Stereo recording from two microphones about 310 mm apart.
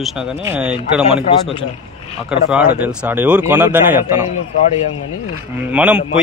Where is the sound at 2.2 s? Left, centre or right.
Centre.